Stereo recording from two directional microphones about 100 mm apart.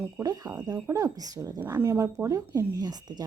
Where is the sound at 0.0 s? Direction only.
35° right (ahead or behind).